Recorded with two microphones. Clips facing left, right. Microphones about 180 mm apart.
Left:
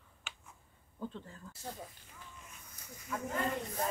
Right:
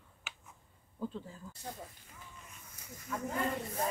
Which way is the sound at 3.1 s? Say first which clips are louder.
Right 1 dB; 5° left (ahead or behind).